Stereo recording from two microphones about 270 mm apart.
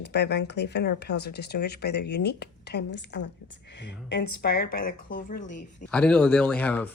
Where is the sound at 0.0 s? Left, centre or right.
Left.